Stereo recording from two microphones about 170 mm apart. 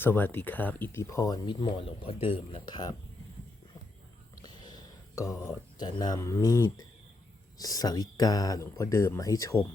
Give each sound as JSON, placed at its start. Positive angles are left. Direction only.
{"t": 0.0, "sound": "speech", "side_deg": 10}
{"t": 4.4, "sound": "a sound", "side_deg": 25}
{"t": 5.5, "sound": "speech", "side_deg": 25}